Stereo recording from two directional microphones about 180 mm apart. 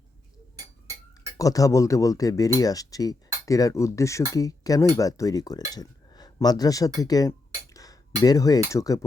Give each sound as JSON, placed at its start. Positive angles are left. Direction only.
{"t": 1.4, "sound": "speech", "side_deg": 20}